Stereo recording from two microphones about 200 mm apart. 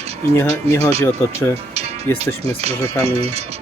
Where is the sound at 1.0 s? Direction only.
10° left (ahead or behind).